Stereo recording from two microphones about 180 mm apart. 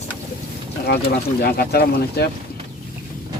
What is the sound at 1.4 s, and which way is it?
Speech, 60° left (ahead or behind).